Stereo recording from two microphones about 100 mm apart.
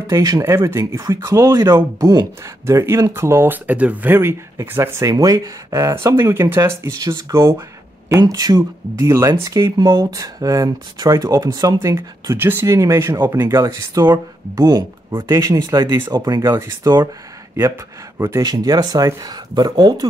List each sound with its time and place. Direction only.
0.1 s speech: 40° right (ahead or behind)
0.4 s speech: 25° right (ahead or behind)
2.6 s speech: 25° right (ahead or behind)
3.6 s speech: 15° right (ahead or behind)
5.1 s speech: 40° right (ahead or behind)
8.2 s speech: 40° right (ahead or behind)
9.8 s speech: 40° right (ahead or behind)
12.4 s speech: 20° right (ahead or behind)
12.6 s speech: 35° right (ahead or behind)
13.6 s speech: 40° right (ahead or behind)
18.4 s speech: 45° right (ahead or behind)